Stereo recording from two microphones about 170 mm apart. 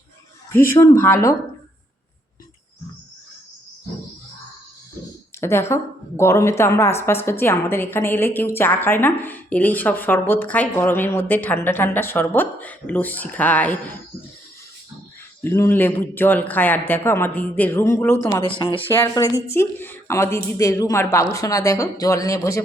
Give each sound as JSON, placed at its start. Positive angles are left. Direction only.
{"t": 0.5, "sound": "a woman's voice", "side_deg": 15}
{"t": 5.4, "sound": "a woman's voice", "side_deg": 15}
{"t": 15.4, "sound": "a woman's voice", "side_deg": 15}